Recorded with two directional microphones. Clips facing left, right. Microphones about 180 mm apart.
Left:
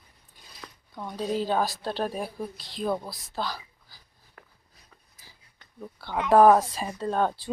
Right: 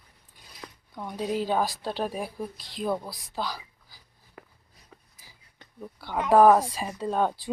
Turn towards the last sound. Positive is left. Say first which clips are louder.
# even
turn(degrees=-5)  # may be behind; listen again after turning